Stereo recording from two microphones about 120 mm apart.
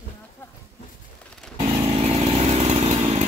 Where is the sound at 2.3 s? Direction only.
65° right (ahead or behind).